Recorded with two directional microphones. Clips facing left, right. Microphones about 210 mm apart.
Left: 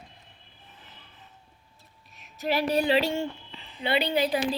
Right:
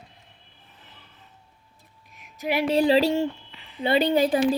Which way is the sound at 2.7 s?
35° right (ahead or behind).